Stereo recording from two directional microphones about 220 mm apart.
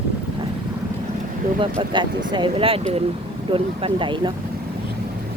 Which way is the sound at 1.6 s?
20° right (ahead or behind).